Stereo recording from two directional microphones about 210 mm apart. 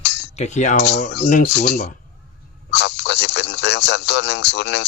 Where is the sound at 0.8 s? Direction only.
55° left (ahead or behind).